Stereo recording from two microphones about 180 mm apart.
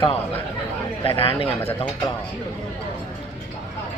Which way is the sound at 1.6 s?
30° left (ahead or behind).